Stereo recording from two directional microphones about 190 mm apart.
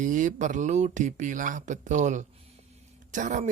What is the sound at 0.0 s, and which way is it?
Speech, 40° right (ahead or behind).